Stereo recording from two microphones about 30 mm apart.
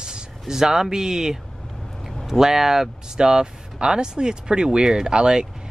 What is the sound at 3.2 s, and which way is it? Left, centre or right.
Speech, right.